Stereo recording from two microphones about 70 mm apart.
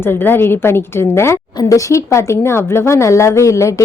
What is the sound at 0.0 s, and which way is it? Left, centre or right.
A woman's voice, left.